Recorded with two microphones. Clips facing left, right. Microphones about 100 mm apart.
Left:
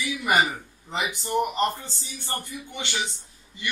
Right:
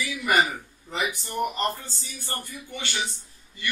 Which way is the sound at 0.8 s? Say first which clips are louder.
Left 1 dB; 20° left (ahead or behind).